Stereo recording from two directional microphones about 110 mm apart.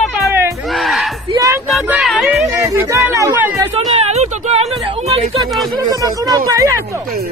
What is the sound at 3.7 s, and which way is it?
Speech, 75° right (ahead or behind).